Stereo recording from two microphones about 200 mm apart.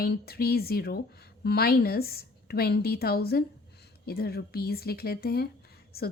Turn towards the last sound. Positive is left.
turn(degrees=50)  # may be behind; listen again after turning